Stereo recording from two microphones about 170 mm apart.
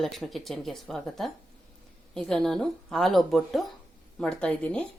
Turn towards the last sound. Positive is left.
turn(degrees=5)  # may be behind; listen again after turning